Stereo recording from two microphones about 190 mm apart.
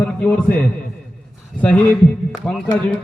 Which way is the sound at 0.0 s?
5° left (ahead or behind).